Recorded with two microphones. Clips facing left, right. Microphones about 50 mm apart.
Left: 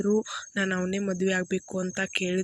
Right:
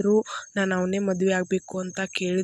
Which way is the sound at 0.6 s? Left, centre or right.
Centre.